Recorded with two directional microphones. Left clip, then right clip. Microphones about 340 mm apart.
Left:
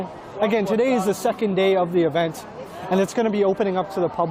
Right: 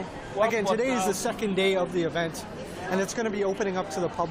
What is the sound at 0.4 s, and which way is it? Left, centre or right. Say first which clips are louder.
Speech: left 5 dB; left.